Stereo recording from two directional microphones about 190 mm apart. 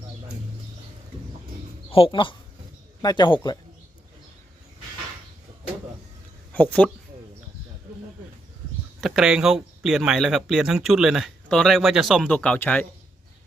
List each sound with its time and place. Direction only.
1.9 s speech: 30° left (ahead or behind)
6.5 s speech: 5° left (ahead or behind)
9.0 s speech: centre (ahead or behind)